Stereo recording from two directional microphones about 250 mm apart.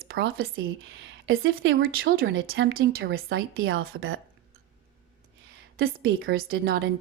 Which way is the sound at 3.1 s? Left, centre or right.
Right.